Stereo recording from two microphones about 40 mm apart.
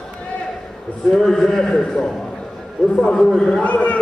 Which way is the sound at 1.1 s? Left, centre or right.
Centre.